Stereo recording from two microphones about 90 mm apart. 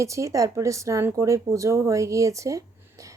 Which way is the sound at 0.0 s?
35° right (ahead or behind).